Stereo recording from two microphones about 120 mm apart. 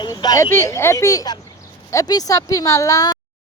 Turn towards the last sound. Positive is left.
turn(degrees=30)  # may be behind; listen again after turning